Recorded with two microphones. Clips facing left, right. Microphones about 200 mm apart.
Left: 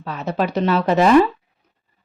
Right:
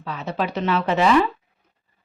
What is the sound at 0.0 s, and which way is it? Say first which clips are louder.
Speech: left 4 dB; 45° left (ahead or behind).